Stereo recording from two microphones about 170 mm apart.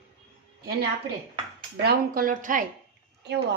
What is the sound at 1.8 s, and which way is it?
Speech, 55° right (ahead or behind).